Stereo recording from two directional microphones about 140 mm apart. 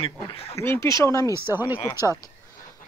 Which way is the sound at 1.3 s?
15° right (ahead or behind).